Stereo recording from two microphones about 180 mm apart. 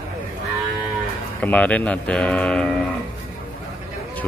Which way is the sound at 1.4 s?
10° left (ahead or behind).